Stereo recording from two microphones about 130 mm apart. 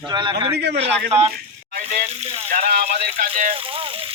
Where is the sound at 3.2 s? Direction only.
75° right (ahead or behind).